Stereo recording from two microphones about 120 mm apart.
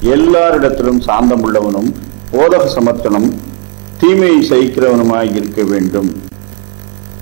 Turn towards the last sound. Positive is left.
turn(degrees=-20)  # may be behind; listen again after turning